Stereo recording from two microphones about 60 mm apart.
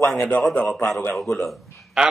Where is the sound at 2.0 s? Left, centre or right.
Centre.